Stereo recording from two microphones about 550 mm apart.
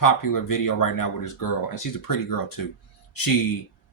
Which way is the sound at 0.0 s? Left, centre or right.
Left.